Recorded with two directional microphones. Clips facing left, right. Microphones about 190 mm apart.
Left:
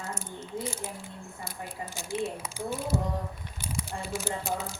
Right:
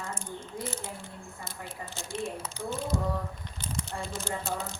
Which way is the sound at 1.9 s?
10° left (ahead or behind).